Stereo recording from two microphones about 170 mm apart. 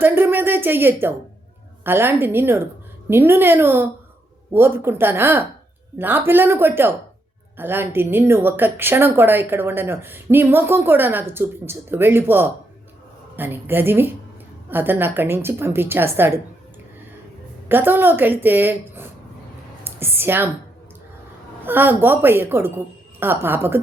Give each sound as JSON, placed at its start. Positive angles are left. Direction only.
{"t": 0.0, "sound": "speech", "side_deg": -10}
{"t": 17.7, "sound": "speech", "side_deg": -10}
{"t": 19.8, "sound": "a sound", "side_deg": -15}
{"t": 21.6, "sound": "speech", "side_deg": -10}